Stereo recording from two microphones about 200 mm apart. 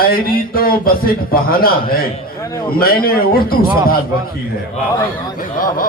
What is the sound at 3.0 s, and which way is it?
Speech, 45° left (ahead or behind).